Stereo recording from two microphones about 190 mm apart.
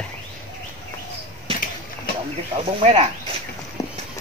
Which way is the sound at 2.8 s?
30° right (ahead or behind).